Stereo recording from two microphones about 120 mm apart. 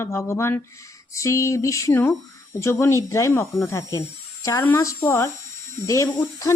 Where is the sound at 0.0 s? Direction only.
20° left (ahead or behind).